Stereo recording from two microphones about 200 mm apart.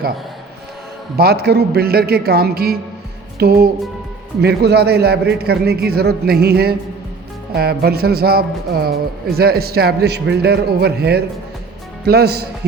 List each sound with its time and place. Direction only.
1.1 s a man's voice: 50° right (ahead or behind)